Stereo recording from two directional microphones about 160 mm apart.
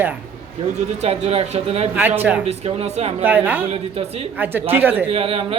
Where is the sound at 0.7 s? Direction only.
40° right (ahead or behind).